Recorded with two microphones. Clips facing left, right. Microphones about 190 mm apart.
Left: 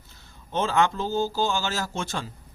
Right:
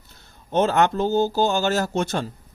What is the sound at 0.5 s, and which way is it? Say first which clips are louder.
Speech: right 5 dB; 65° right (ahead or behind).